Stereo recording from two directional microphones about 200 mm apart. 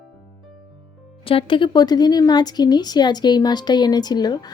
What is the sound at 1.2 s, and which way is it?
Speech, 25° left (ahead or behind).